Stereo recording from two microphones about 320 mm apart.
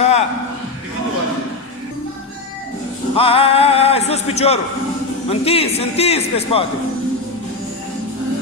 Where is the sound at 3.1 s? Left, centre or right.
Centre.